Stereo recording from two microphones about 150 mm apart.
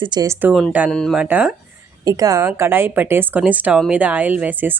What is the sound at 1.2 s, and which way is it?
Speech, 10° right (ahead or behind).